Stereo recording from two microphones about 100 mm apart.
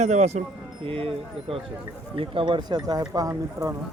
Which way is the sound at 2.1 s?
60° right (ahead or behind).